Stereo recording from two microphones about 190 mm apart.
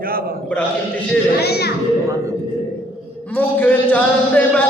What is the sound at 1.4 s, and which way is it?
Children playing, 60° left (ahead or behind).